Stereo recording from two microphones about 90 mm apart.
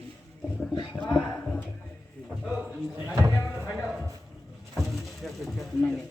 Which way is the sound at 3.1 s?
35° right (ahead or behind).